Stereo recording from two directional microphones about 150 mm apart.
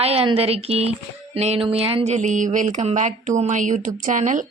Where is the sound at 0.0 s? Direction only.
40° right (ahead or behind).